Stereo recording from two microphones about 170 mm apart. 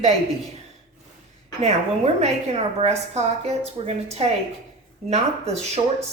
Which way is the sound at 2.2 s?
40° right (ahead or behind).